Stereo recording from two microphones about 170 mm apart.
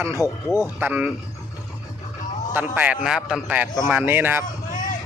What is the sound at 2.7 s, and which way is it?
A man's voice, 10° right (ahead or behind).